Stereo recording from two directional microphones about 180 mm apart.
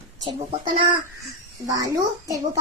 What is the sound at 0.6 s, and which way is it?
Speech, 25° right (ahead or behind).